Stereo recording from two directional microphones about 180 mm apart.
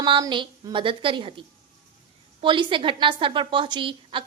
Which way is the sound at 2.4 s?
25° right (ahead or behind).